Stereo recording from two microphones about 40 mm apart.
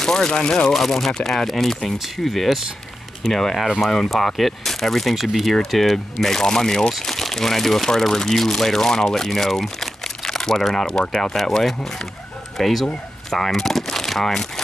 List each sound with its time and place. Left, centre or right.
0.0 s speech: centre
0.7 s speech: centre
12.5 s speech: centre